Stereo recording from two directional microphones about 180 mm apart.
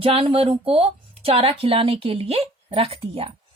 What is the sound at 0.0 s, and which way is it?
A woman's voice, 30° right (ahead or behind).